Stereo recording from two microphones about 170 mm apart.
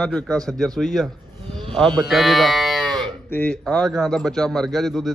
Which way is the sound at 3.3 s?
10° left (ahead or behind).